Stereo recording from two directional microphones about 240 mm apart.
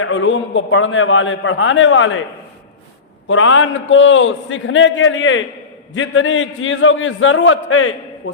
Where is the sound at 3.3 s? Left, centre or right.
Left.